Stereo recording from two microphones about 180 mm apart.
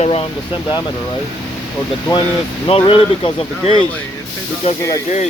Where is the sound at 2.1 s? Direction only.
25° left (ahead or behind); by 5.3 s 40° left (ahead or behind).